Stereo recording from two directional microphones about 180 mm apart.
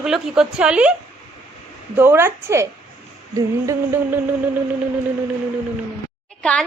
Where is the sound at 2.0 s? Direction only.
15° right (ahead or behind).